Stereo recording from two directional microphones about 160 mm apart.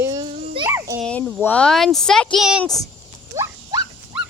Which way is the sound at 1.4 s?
10° left (ahead or behind).